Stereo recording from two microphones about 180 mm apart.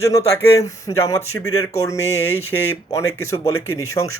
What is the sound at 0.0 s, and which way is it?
Speech, 15° left (ahead or behind).